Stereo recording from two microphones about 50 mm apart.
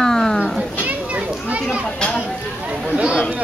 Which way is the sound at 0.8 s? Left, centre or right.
Right.